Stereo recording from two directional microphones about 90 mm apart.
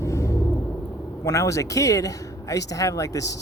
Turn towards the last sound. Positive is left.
turn(degrees=40)  # may be behind; listen again after turning